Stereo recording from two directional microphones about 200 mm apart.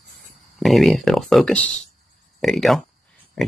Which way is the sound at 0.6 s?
Centre (ahead or behind).